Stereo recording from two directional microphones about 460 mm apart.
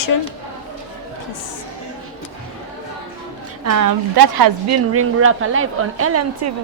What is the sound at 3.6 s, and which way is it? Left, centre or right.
Speech, right.